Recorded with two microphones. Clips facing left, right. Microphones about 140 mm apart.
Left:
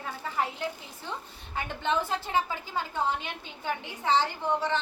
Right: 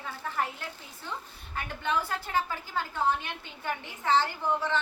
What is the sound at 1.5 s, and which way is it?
A woman's voice, 20° left (ahead or behind).